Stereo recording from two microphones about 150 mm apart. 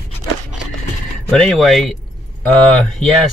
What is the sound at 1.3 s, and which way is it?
Speech, centre (ahead or behind).